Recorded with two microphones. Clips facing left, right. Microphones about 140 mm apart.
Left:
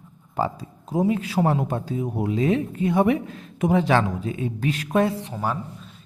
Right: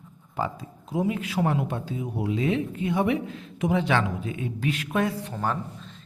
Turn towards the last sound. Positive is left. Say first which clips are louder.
# left 1 dB
turn(degrees=5)  # may be behind; listen again after turning